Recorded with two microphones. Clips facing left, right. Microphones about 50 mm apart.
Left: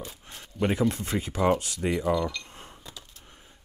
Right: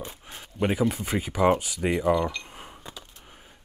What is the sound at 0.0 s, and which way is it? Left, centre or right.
Speech, centre.